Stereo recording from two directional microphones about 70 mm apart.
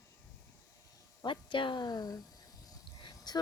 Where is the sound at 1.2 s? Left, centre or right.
Left.